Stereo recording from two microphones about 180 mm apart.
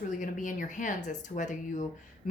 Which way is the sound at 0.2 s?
45° left (ahead or behind).